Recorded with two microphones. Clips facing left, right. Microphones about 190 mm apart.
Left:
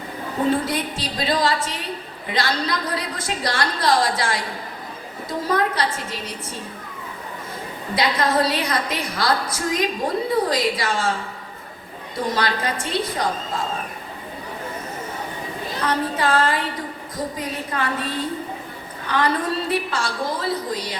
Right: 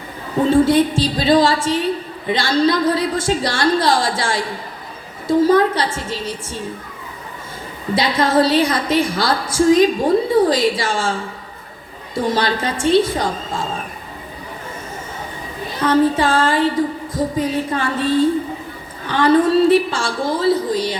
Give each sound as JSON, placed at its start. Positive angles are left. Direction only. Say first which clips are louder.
{"t": 0.5, "sound": "a woman's voice", "louder": "right 10 dB", "side_deg": -30}
{"t": 5.5, "sound": "a woman's voice", "louder": "right 7 dB", "side_deg": -30}
{"t": 7.9, "sound": "a woman's voice", "louder": "right 4 dB", "side_deg": -30}
{"t": 15.9, "sound": "a woman's voice", "louder": "right 7 dB", "side_deg": -30}